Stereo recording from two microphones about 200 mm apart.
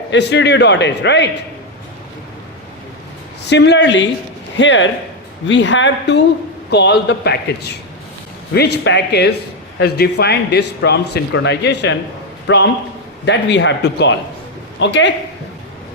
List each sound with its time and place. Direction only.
0.1 s a man's voice: 60° left (ahead or behind)
3.4 s a man's voice: 60° left (ahead or behind)